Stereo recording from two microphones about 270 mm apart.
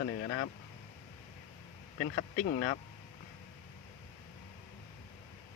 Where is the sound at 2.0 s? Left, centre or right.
Left.